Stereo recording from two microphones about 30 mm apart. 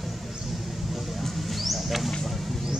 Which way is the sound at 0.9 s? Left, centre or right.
Centre.